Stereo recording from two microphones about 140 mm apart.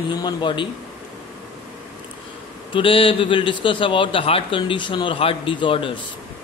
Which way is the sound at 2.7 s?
40° left (ahead or behind).